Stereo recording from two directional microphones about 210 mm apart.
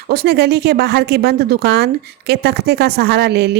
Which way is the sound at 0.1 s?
50° right (ahead or behind).